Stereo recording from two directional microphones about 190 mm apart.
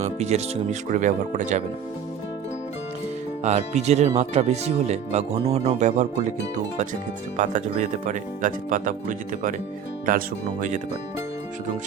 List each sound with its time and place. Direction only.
0.0 s speech: 35° right (ahead or behind)
3.4 s speech: 35° right (ahead or behind)
7.3 s speech: 40° right (ahead or behind)